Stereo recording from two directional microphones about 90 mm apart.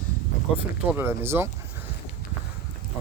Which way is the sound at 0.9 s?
25° right (ahead or behind).